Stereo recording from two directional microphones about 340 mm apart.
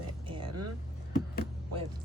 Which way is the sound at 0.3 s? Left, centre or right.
Centre.